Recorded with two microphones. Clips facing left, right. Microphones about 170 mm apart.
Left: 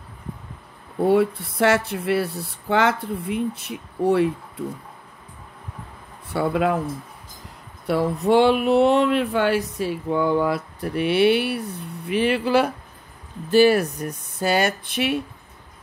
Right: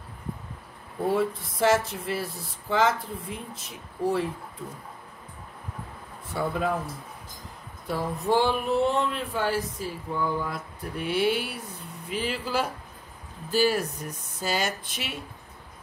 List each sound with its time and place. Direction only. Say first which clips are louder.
1.0 s speech: left 7 dB; 65° left (ahead or behind)
6.3 s speech: left 6 dB; 70° left (ahead or behind)
7.8 s speech: left 8 dB; 75° left (ahead or behind)